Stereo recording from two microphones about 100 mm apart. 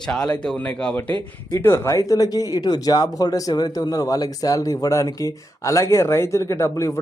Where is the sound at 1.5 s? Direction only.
30° left (ahead or behind).